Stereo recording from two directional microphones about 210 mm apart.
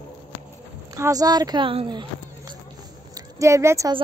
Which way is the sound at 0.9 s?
15° right (ahead or behind).